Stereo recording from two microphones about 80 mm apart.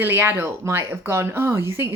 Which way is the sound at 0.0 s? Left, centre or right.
Right.